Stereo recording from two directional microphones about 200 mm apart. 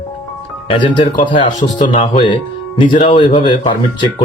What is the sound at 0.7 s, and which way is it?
Speech, 25° left (ahead or behind).